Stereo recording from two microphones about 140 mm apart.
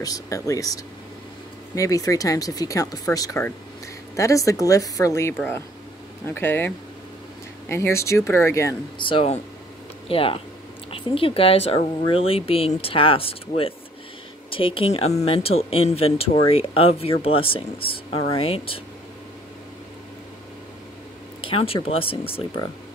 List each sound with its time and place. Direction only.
0.0 s speech: 25° left (ahead or behind)
1.8 s speech: 25° left (ahead or behind)
8.9 s speech: 35° left (ahead or behind)
14.5 s speech: 40° left (ahead or behind)
21.4 s speech: 40° left (ahead or behind)